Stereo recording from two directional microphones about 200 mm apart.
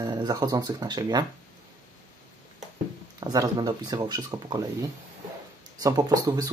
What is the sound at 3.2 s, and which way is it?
Speech, 20° right (ahead or behind).